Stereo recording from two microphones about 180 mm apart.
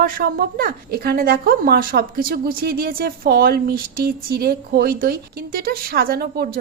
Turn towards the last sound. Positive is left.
turn(degrees=-60)  # may be behind; listen again after turning